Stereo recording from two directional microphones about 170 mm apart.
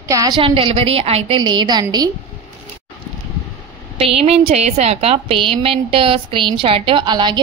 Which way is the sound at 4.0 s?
35° right (ahead or behind).